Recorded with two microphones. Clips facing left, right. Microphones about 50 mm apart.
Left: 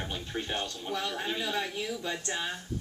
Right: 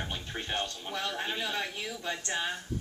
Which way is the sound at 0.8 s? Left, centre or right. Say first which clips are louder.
Left 1 dB; centre.